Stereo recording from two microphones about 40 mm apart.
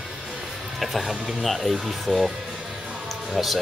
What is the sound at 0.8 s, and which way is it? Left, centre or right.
Speech, centre.